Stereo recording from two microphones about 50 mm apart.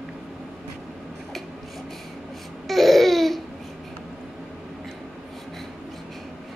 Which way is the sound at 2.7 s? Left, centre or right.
Centre.